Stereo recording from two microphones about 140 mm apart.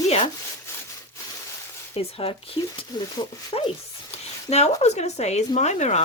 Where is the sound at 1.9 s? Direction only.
45° left (ahead or behind).